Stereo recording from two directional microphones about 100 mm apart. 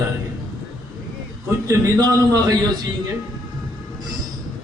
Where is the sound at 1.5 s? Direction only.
30° right (ahead or behind).